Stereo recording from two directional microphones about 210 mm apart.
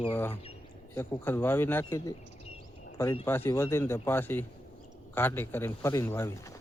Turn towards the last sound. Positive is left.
turn(degrees=10)  # may be behind; listen again after turning